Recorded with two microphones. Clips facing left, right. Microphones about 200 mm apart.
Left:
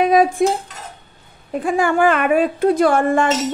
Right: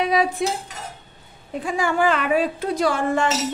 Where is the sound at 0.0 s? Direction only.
50° left (ahead or behind).